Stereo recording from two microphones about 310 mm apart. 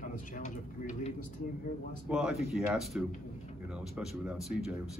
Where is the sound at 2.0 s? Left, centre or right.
Centre.